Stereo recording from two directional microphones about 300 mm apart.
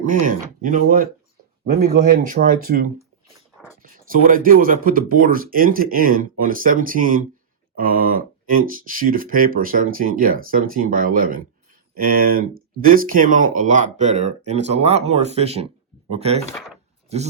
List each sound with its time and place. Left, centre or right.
0.3 s speech: right
16.5 s speech: centre